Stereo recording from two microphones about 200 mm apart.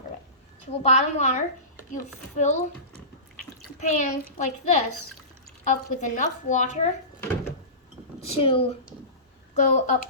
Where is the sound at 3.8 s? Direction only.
40° left (ahead or behind).